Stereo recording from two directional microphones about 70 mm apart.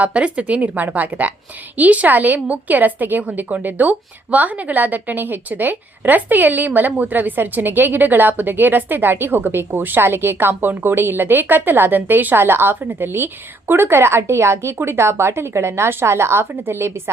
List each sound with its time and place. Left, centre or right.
0.0 s a woman's voice: centre; by 16.9 s right